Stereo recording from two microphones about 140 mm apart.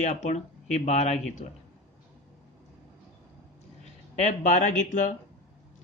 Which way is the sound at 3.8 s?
55° left (ahead or behind).